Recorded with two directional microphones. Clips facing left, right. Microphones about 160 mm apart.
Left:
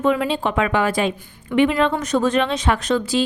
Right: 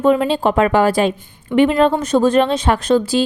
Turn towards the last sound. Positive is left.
turn(degrees=-30)  # may be behind; listen again after turning